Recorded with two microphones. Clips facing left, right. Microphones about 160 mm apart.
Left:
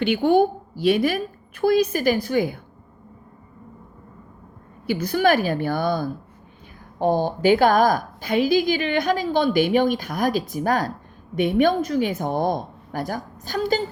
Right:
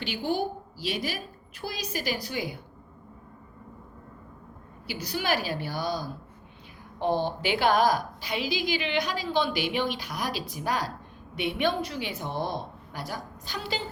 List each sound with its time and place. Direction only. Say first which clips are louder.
0.0 s a woman's voice: left 11 dB; 60° left (ahead or behind)
4.9 s a woman's voice: left 10 dB; 50° left (ahead or behind)